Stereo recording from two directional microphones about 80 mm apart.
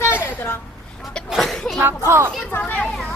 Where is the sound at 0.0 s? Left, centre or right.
Left.